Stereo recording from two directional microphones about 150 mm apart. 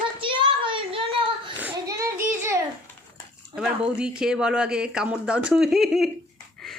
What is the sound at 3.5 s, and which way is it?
Speech, 5° right (ahead or behind).